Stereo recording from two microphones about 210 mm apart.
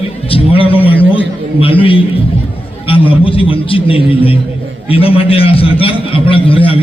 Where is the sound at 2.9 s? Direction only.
25° left (ahead or behind).